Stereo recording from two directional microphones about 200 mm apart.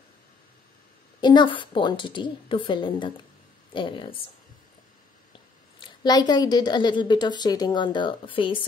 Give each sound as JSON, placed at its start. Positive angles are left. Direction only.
{"t": 1.2, "sound": "a woman's voice", "side_deg": 20}
{"t": 5.8, "sound": "a woman's voice", "side_deg": 20}